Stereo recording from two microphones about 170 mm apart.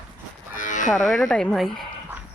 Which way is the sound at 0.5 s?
50° left (ahead or behind).